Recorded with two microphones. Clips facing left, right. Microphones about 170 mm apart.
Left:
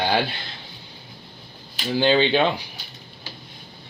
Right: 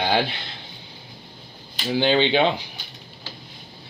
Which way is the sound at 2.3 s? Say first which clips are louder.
Right 1 dB; 15° right (ahead or behind).